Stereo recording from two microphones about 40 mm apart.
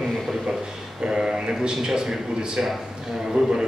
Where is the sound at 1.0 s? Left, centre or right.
Centre.